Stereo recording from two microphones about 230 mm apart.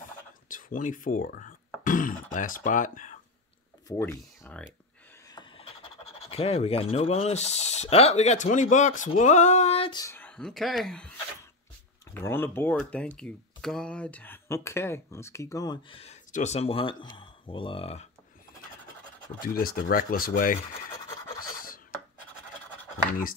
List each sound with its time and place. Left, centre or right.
0.5 s throat clearing: left
2.3 s speech: left
3.9 s speech: centre
6.2 s speech: left
19.2 s speech: left
21.4 s filing: left